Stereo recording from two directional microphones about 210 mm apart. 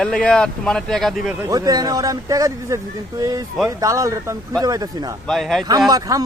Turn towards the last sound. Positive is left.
turn(degrees=-15)  # may be behind; listen again after turning